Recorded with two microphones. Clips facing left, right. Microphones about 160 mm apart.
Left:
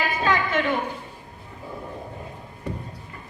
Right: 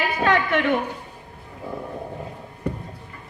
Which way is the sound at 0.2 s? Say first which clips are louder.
Right 4 dB; 65° right (ahead or behind).